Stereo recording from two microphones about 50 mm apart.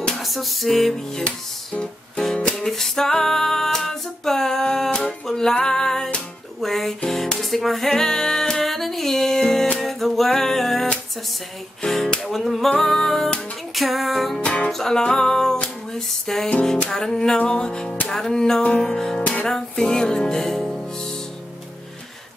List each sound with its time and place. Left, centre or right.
0.2 s music: centre
2.5 s music: centre
5.6 s female singing: centre
6.6 s music: centre
14.4 s music: left
14.7 s music: centre